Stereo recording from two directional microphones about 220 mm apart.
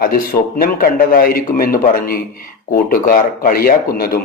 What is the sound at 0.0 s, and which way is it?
A man's voice, 40° left (ahead or behind).